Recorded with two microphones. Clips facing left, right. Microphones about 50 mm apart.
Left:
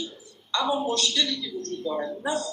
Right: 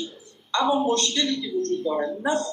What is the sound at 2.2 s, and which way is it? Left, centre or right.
Speech, right.